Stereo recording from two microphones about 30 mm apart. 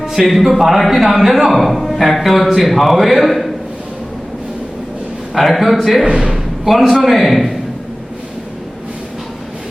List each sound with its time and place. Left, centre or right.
0.0 s music: centre
0.3 s a man's voice: centre
5.3 s a man's voice: centre
6.1 s a man's voice: centre
7.0 s a man's voice: centre